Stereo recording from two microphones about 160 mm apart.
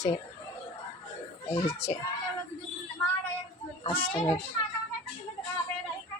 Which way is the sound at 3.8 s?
35° left (ahead or behind).